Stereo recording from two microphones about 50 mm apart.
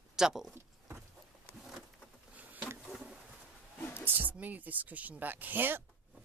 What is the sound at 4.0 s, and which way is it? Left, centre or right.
Speech, right.